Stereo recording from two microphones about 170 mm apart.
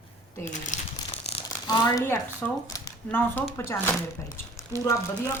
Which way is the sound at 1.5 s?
25° left (ahead or behind).